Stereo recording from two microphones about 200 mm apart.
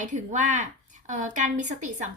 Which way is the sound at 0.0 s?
40° right (ahead or behind).